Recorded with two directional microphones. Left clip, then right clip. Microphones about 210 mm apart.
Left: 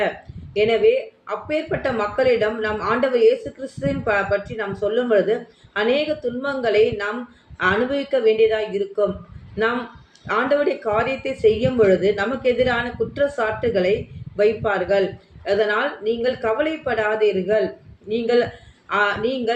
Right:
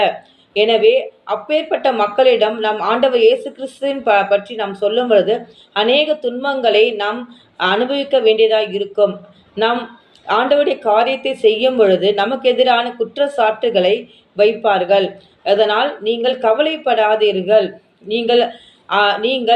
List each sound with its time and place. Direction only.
0.5 s speech: 15° left (ahead or behind)
10.2 s speech: 20° left (ahead or behind)